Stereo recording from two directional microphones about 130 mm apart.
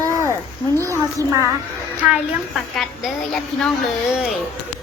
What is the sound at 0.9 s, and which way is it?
Speech, 25° right (ahead or behind).